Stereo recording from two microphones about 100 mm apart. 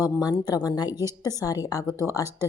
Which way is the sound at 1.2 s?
35° left (ahead or behind).